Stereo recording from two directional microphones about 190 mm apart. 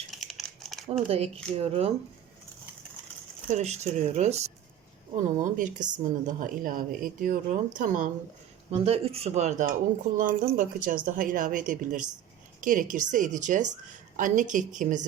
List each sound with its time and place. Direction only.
0.1 s crumpling: centre (ahead or behind)
1.0 s speech: 30° right (ahead or behind)
3.5 s a woman's voice: 35° right (ahead or behind)
8.7 s a woman's voice: 30° right (ahead or behind)